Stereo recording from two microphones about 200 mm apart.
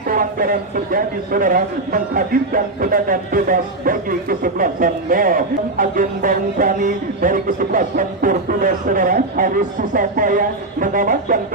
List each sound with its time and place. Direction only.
0.1 s a man's voice: 45° right (ahead or behind)